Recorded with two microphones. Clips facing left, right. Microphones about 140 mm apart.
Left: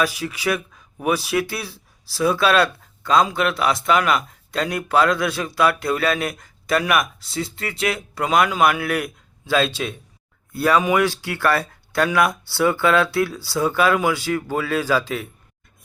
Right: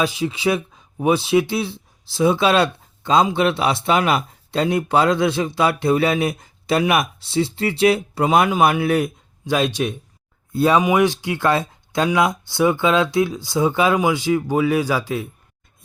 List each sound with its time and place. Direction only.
0.0 s speech: 25° right (ahead or behind)